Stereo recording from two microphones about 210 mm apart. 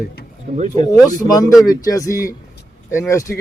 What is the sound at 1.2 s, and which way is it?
Speech, 35° right (ahead or behind).